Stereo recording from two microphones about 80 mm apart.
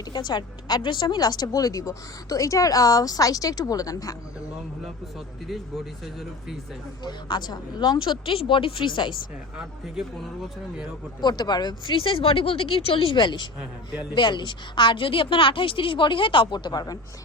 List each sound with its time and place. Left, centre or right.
0.1 s a woman's voice: left
5.5 s speech: centre
7.0 s speech: left
9.6 s speech: centre
11.2 s a woman's voice: left